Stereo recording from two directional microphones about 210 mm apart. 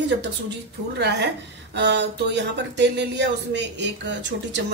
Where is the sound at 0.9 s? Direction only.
55° right (ahead or behind).